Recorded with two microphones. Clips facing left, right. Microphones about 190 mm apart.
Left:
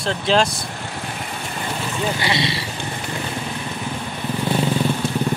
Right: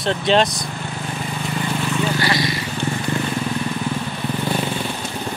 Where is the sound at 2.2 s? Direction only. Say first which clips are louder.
Right 2 dB; 25° left (ahead or behind).